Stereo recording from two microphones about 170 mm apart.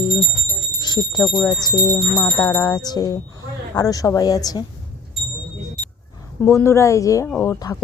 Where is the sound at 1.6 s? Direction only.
20° left (ahead or behind).